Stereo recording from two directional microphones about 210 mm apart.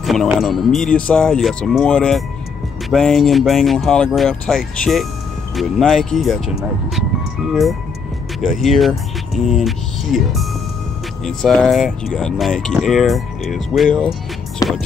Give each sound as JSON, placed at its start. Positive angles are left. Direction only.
{"t": 0.0, "sound": "speech", "side_deg": 0}
{"t": 8.4, "sound": "speech", "side_deg": 0}
{"t": 14.6, "sound": "music", "side_deg": 15}